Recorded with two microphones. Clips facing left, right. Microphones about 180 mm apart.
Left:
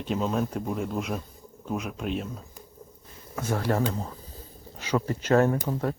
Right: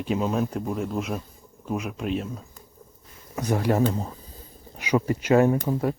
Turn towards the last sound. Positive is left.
turn(degrees=-10)  # may be behind; listen again after turning